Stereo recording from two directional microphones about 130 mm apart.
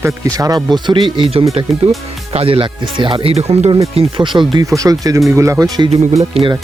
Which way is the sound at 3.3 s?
55° right (ahead or behind).